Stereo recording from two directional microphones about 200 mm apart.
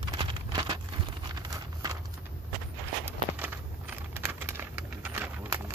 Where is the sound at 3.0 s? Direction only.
10° right (ahead or behind).